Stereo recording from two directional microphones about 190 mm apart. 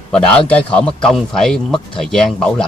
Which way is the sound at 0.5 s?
5° left (ahead or behind).